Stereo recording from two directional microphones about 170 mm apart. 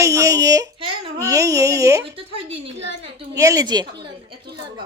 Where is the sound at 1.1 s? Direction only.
20° right (ahead or behind).